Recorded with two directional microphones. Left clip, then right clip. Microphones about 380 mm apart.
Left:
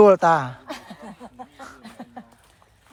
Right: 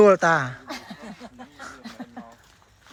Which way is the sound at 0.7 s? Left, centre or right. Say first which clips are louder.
Even; left.